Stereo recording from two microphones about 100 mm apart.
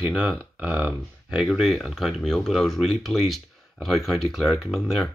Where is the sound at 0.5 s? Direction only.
15° right (ahead or behind).